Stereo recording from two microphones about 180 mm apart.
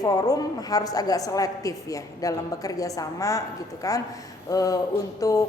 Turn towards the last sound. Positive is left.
turn(degrees=20)  # may be behind; listen again after turning